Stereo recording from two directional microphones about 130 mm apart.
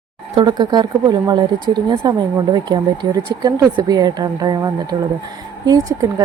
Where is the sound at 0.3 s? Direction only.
35° right (ahead or behind).